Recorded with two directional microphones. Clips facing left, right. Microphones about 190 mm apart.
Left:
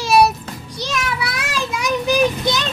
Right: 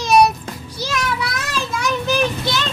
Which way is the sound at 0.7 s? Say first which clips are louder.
Even; centre (ahead or behind).